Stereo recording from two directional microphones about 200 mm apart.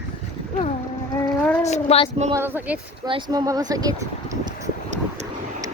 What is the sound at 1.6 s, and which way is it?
Speech, 30° left (ahead or behind).